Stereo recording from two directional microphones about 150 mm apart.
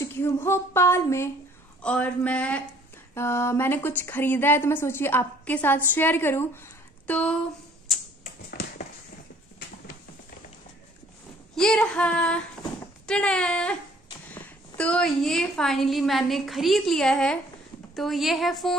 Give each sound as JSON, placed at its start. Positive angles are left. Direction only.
{"t": 0.0, "sound": "a woman's voice", "side_deg": 15}
{"t": 8.2, "sound": "a sound", "side_deg": 70}
{"t": 11.5, "sound": "a woman's voice", "side_deg": 5}